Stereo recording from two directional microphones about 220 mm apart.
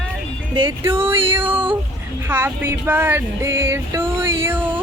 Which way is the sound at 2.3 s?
10° right (ahead or behind).